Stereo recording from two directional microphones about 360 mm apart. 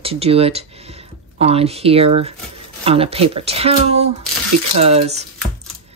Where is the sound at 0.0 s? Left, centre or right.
Centre.